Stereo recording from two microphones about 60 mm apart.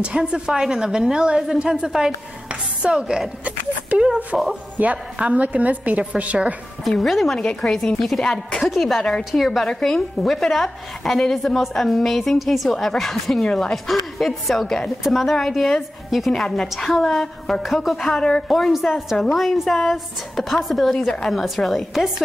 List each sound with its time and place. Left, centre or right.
0.0 s a woman's voice: centre
2.9 s a woman's voice: centre
3.4 s a woman's voice: centre
6.8 s a woman's voice: centre